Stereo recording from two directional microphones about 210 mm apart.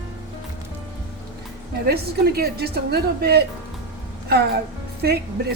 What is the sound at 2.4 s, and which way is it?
A woman's voice, 50° right (ahead or behind).